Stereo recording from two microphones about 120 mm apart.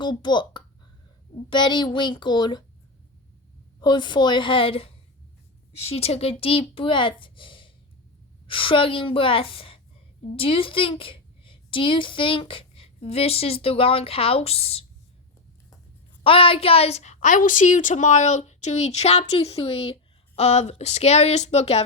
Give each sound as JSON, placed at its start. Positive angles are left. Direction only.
{"t": 0.0, "sound": "a child's voice", "side_deg": 40}
{"t": 3.8, "sound": "a child's voice", "side_deg": 40}
{"t": 16.2, "sound": "a woman's voice", "side_deg": 50}